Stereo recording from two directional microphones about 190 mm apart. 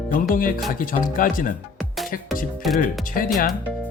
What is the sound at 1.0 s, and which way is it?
Speech, 45° left (ahead or behind).